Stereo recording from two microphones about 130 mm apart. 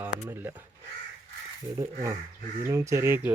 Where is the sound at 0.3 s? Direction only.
15° right (ahead or behind).